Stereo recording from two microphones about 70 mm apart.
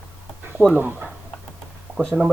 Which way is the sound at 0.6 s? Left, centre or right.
Right.